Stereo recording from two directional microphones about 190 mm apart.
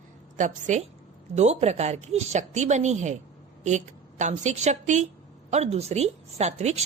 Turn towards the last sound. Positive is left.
turn(degrees=-35)  # may be behind; listen again after turning